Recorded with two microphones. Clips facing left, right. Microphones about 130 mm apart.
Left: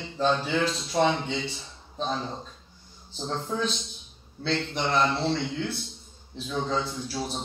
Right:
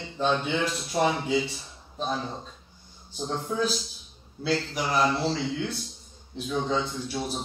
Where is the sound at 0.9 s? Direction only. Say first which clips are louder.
Right 1 dB; 5° right (ahead or behind).